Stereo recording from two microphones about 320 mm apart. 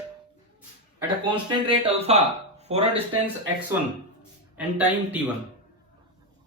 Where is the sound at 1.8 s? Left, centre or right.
Centre.